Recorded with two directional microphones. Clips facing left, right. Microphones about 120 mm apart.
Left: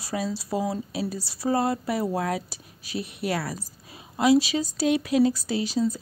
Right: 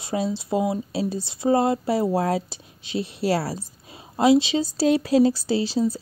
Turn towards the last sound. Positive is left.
turn(degrees=-30)  # may be behind; listen again after turning